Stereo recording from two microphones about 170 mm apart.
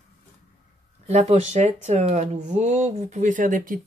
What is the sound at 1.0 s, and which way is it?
Speech, 40° right (ahead or behind).